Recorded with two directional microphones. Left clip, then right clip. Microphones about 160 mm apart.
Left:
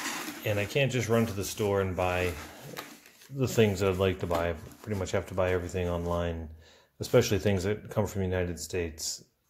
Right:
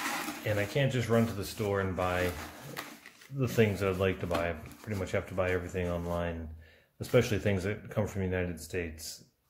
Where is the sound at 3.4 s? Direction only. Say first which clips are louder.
Left 3 dB; 35° left (ahead or behind).